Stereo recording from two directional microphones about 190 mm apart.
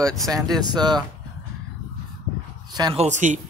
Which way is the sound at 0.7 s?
20° right (ahead or behind).